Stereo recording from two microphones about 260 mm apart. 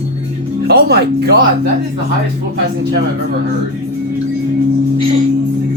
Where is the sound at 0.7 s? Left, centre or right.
Right.